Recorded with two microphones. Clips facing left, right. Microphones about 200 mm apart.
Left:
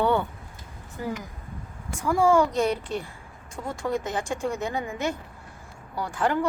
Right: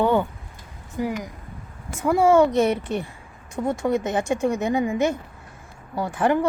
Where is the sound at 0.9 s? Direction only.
15° right (ahead or behind).